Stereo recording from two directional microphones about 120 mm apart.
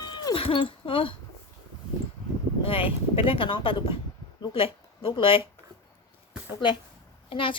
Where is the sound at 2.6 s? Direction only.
50° left (ahead or behind).